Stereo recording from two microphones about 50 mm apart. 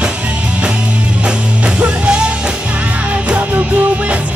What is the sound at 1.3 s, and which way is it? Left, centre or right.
Music, centre.